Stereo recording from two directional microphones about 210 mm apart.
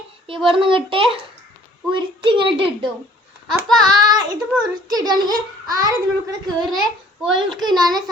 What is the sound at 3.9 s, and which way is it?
A child's voice, 20° right (ahead or behind).